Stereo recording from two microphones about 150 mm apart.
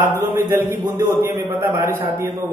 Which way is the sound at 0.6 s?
20° right (ahead or behind).